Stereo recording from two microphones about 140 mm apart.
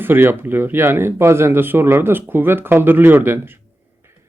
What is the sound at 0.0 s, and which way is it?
Speech, 15° right (ahead or behind).